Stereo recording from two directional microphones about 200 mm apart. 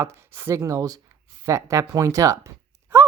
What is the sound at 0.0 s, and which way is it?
Speech, 15° right (ahead or behind).